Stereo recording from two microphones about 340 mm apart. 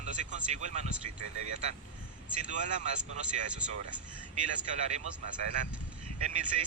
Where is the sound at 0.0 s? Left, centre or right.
Right.